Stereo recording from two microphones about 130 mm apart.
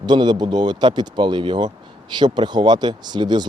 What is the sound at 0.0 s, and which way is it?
Speech, 35° right (ahead or behind).